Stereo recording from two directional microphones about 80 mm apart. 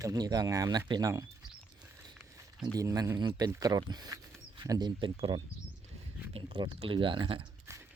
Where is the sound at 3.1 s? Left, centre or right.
Right.